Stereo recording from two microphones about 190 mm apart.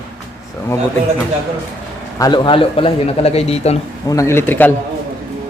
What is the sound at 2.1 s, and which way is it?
A man's voice, 20° left (ahead or behind).